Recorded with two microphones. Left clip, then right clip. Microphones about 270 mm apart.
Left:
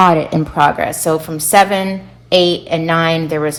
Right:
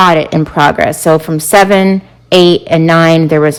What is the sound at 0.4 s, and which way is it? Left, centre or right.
Speech, right.